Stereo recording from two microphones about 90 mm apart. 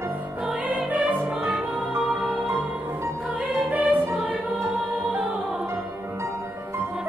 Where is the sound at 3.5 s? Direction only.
20° right (ahead or behind).